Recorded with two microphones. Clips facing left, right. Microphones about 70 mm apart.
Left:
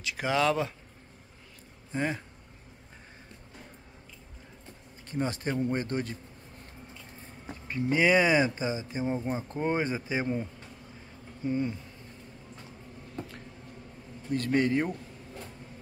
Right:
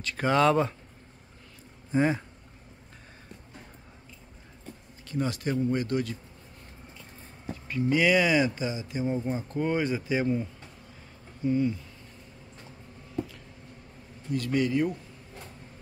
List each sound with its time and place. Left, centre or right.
0.0 s speech: centre
1.9 s speech: centre
5.0 s a man's voice: left
7.6 s speech: left
11.4 s a man's voice: left
14.3 s a man's voice: left